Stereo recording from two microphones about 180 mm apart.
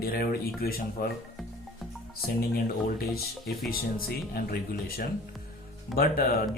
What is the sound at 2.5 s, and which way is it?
Speech, 60° left (ahead or behind).